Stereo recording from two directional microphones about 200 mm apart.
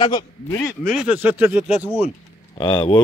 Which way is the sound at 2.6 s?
30° left (ahead or behind).